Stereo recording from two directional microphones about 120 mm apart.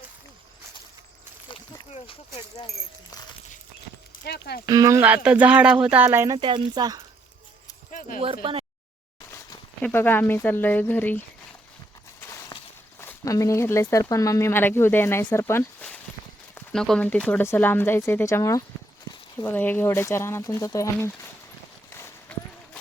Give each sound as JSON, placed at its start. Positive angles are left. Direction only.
{"t": 4.6, "sound": "speech", "side_deg": -30}
{"t": 5.0, "sound": "speech", "side_deg": -10}
{"t": 6.1, "sound": "speech", "side_deg": -25}
{"t": 6.4, "sound": "speech", "side_deg": -40}
{"t": 7.9, "sound": "a sound", "side_deg": 90}
{"t": 8.2, "sound": "speech", "side_deg": -50}
{"t": 9.9, "sound": "speech", "side_deg": 15}
{"t": 12.2, "sound": "a sound", "side_deg": 20}
{"t": 13.0, "sound": "speech", "side_deg": 25}
{"t": 16.6, "sound": "speech", "side_deg": 5}
{"t": 21.9, "sound": "clip-clop", "side_deg": 15}